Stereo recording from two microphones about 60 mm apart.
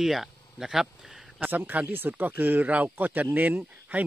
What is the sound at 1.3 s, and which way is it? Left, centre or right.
Speech, right.